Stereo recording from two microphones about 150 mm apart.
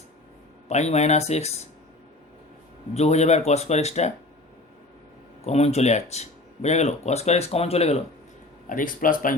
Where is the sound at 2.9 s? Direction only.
45° left (ahead or behind).